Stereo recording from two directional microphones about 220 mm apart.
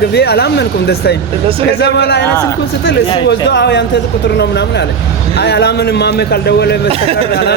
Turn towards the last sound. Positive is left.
turn(degrees=45)  # may be behind; listen again after turning